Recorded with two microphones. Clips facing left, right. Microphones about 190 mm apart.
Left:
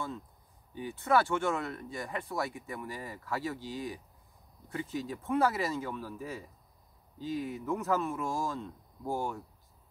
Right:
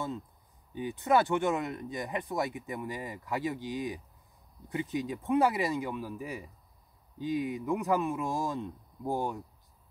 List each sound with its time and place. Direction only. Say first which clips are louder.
0.7 s speech: right 2 dB; 20° right (ahead or behind)